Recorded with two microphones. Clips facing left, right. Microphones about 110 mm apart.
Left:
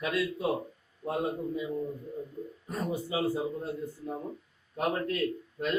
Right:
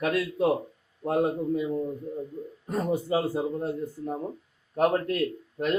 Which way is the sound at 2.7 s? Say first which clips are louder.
Right 7 dB; 65° right (ahead or behind).